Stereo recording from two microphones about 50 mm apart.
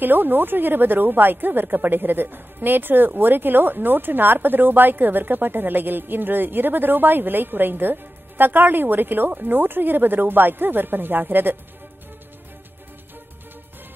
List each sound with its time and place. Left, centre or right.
0.0 s speech: right